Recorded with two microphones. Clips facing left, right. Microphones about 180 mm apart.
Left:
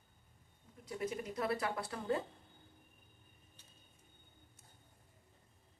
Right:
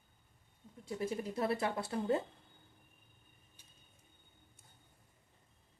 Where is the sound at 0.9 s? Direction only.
30° right (ahead or behind).